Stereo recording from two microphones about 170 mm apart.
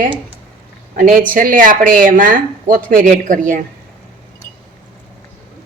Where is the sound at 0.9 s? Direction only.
55° right (ahead or behind).